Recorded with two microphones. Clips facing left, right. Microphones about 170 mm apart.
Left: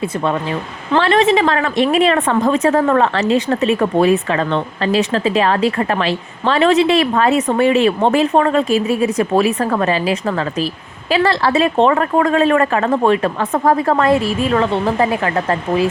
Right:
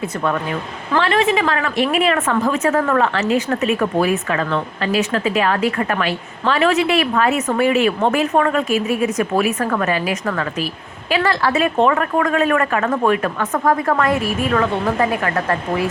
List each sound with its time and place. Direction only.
0.9 s a woman's voice: 35° left (ahead or behind)